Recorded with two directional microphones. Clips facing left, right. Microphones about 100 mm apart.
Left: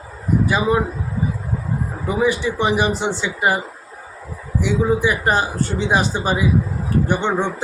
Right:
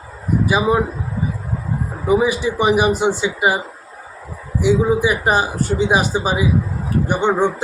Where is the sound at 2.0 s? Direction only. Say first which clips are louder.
Right 3 dB; 10° right (ahead or behind).